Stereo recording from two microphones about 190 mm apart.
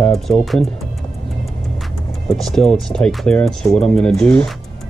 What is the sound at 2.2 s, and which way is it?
Speech, centre (ahead or behind).